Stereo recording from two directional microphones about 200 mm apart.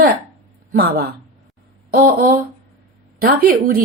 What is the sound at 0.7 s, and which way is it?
Speech, 50° right (ahead or behind).